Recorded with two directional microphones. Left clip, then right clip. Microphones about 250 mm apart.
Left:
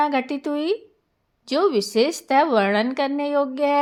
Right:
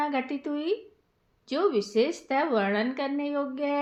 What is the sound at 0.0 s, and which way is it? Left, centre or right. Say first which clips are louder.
A woman's voice: left 7 dB; left.